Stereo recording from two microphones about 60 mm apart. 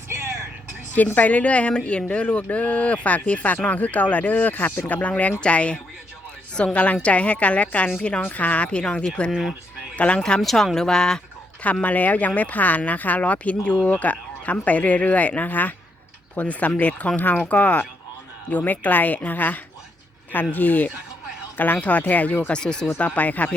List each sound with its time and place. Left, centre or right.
0.9 s speech: left
9.3 s speech: centre
9.9 s speech: left
10.4 s speech: centre
11.6 s speech: left
22.4 s speech: centre
23.0 s speech: left